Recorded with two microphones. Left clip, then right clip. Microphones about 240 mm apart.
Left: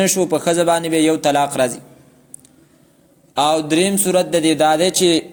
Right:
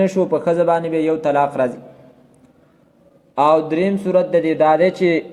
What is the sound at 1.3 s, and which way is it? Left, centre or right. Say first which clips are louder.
Speech: even; left.